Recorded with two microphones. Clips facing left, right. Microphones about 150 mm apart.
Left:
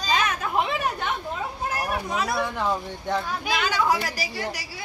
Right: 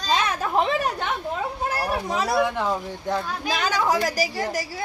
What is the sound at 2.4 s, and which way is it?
Speech, 10° right (ahead or behind).